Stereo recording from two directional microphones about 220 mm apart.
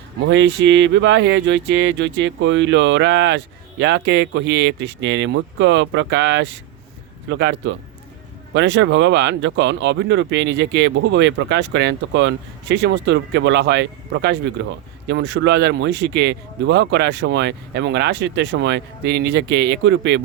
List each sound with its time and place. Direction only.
0.3 s speech: 55° right (ahead or behind)